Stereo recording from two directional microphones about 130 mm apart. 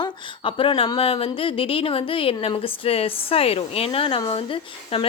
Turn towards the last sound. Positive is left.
turn(degrees=45)  # may be behind; listen again after turning